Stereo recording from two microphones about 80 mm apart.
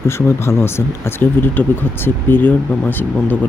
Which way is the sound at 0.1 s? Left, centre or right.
Left.